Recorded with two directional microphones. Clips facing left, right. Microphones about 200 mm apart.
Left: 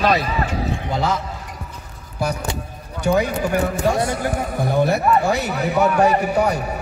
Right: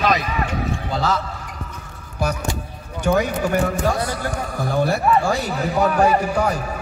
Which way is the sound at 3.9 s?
25° left (ahead or behind).